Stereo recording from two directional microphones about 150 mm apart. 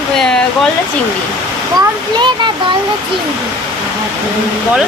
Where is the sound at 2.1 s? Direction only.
30° right (ahead or behind).